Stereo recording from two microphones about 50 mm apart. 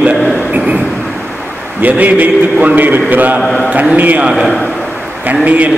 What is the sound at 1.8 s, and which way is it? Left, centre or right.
A man's voice, right.